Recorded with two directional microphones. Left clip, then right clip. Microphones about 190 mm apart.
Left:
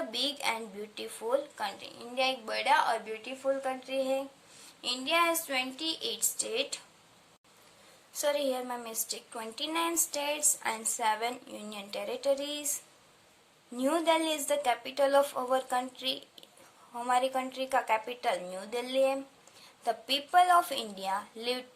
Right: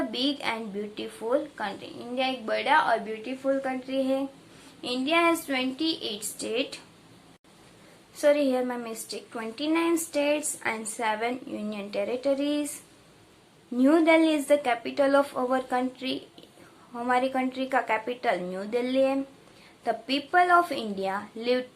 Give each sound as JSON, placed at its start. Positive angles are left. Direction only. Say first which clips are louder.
{"t": 0.1, "sound": "a woman's voice", "louder": "right 3 dB", "side_deg": 30}
{"t": 8.2, "sound": "a woman's voice", "louder": "right 7 dB", "side_deg": 25}
{"t": 13.7, "sound": "a woman's voice", "louder": "right 7 dB", "side_deg": 25}